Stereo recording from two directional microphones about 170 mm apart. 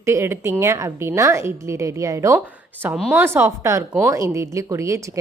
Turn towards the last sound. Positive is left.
turn(degrees=-20)  # may be behind; listen again after turning